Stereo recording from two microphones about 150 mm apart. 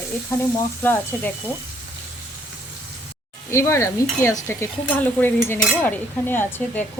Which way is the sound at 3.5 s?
20° left (ahead or behind).